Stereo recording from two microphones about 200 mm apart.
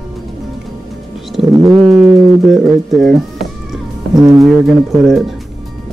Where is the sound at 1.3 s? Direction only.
Centre (ahead or behind).